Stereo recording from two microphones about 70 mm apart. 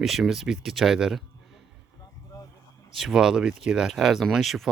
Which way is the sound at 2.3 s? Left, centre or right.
Left.